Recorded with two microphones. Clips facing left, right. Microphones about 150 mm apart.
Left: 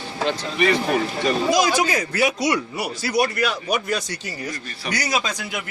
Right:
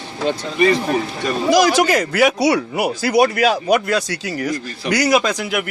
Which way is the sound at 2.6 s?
65° right (ahead or behind).